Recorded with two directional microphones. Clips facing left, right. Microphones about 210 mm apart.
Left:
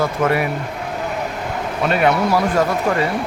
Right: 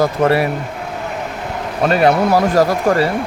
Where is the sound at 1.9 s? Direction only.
40° right (ahead or behind).